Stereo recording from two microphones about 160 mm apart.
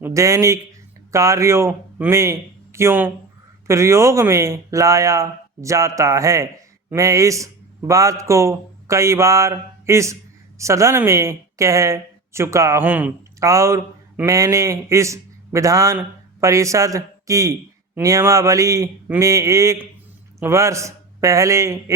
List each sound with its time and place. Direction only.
0.0 s speech: 20° right (ahead or behind)